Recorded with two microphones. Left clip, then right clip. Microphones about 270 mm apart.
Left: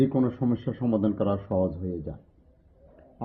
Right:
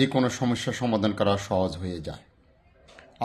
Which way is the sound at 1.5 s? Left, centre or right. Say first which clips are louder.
Right 1 dB; right.